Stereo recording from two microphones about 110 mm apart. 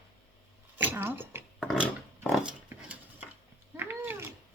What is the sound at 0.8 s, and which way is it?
Speech, 20° right (ahead or behind).